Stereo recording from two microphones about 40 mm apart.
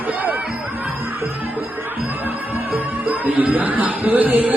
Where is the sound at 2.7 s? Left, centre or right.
Right.